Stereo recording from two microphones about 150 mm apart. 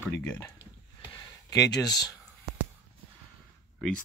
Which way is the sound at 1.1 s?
25° left (ahead or behind).